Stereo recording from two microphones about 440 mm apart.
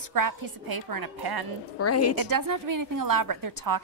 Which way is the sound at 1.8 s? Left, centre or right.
Left.